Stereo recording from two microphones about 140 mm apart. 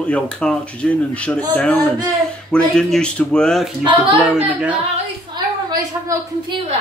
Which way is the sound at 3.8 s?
35° right (ahead or behind).